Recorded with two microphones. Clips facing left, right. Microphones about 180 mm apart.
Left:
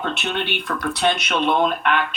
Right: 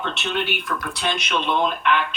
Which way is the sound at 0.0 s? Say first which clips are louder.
Left 1 dB; 55° left (ahead or behind).